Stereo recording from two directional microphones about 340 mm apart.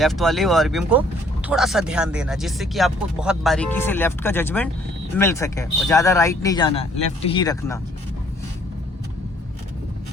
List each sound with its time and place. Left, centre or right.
0.0 s speech: centre